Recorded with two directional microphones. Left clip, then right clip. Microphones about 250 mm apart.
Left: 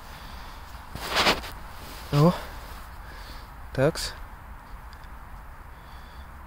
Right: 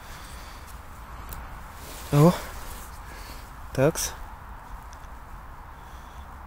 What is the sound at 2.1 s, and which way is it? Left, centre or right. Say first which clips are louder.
Speech: right 2 dB; centre.